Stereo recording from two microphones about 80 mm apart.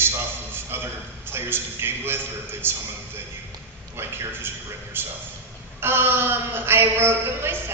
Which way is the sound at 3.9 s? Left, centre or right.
Right.